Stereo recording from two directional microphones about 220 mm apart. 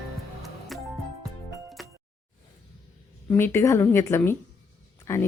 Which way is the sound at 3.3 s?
10° left (ahead or behind).